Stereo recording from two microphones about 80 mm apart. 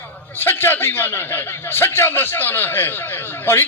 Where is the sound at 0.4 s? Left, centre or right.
Left.